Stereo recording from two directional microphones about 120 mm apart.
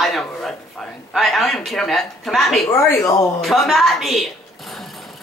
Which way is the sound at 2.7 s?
25° left (ahead or behind).